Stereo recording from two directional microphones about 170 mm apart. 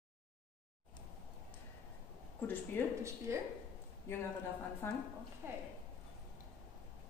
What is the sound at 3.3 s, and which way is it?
Speech, 15° right (ahead or behind).